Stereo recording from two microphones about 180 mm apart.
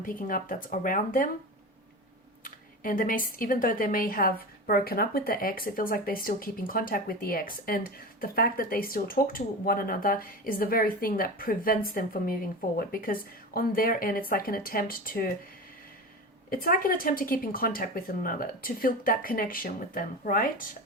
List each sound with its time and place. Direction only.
0.0 s a woman's voice: 50° left (ahead or behind)
2.4 s a woman's voice: 50° left (ahead or behind)
16.5 s a woman's voice: 50° left (ahead or behind)